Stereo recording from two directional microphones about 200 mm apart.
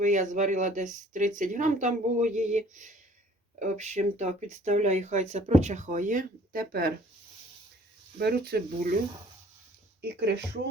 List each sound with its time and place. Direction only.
0.0 s speech: 40° right (ahead or behind)
8.2 s speech: 50° right (ahead or behind)
10.0 s speech: 55° right (ahead or behind)